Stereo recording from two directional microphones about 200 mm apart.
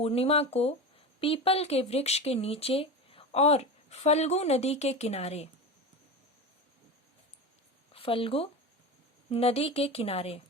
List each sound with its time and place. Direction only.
0.0 s speech: 30° left (ahead or behind)
7.9 s speech: 25° left (ahead or behind)